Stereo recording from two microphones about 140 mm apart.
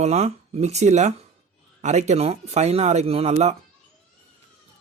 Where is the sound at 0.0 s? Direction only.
50° right (ahead or behind).